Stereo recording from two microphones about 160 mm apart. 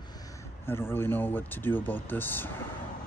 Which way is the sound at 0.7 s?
15° left (ahead or behind).